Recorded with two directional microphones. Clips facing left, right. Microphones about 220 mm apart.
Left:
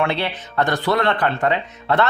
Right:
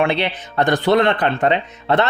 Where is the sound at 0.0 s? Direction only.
15° right (ahead or behind).